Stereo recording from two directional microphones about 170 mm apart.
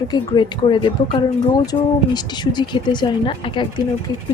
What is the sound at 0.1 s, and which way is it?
A woman's voice, 25° left (ahead or behind).